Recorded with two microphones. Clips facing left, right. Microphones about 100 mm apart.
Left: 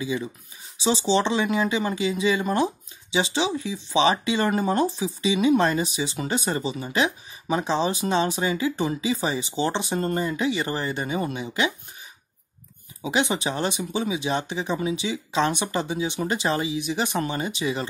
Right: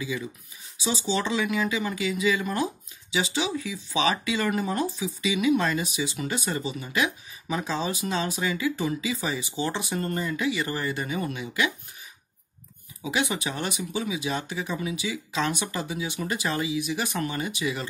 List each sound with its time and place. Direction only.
0.0 s speech: 25° left (ahead or behind)
13.0 s speech: 25° left (ahead or behind)